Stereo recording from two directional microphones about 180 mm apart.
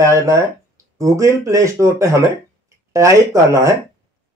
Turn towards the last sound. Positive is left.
turn(degrees=-15)  # may be behind; listen again after turning